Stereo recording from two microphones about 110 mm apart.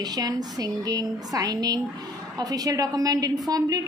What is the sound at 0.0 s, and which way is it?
A woman's voice, 35° right (ahead or behind).